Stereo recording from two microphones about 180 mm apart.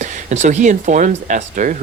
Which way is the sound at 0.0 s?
40° right (ahead or behind).